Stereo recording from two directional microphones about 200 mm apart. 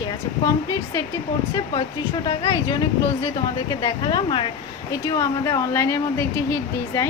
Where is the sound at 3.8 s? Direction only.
25° left (ahead or behind).